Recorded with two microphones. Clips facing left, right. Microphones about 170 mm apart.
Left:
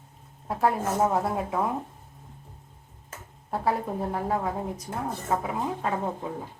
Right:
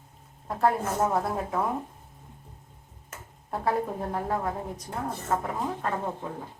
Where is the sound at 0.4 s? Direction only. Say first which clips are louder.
Even; 5° left (ahead or behind).